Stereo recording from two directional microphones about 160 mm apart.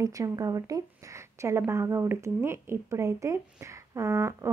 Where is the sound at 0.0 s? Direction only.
20° right (ahead or behind).